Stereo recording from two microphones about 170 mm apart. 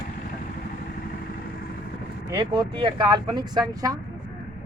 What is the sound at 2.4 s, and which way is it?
Speech, 30° right (ahead or behind).